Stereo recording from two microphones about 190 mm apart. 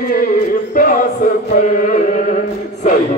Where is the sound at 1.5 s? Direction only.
45° left (ahead or behind).